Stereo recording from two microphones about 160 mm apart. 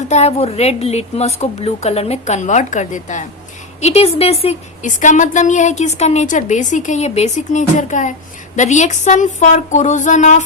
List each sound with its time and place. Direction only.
0.1 s a woman's voice: 45° left (ahead or behind)